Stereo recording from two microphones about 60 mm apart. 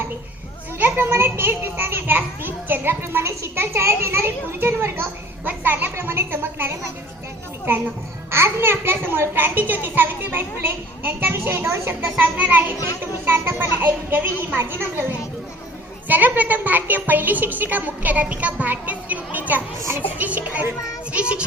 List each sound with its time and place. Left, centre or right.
0.8 s a child's voice: right
5.5 s a child's voice: right
8.3 s a child's voice: right
12.2 s a child's voice: right
12.7 s speech: left
13.0 s a child's voice: right
16.0 s a woman's voice: right